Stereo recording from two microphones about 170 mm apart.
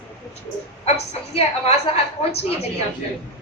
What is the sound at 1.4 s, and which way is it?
Speech, 40° left (ahead or behind).